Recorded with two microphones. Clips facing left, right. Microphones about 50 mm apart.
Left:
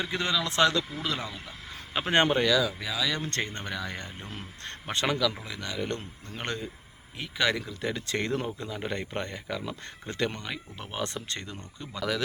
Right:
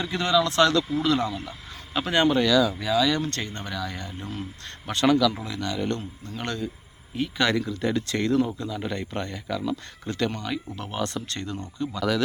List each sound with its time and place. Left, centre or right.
0.0 s speech: centre
1.9 s speech: left
2.1 s speech: left
2.4 s speech: centre
2.6 s speech: centre
3.2 s speech: left
6.0 s speech: left
7.2 s speech: centre
8.0 s speech: left